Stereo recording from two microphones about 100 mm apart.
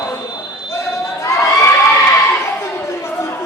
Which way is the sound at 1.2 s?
30° left (ahead or behind).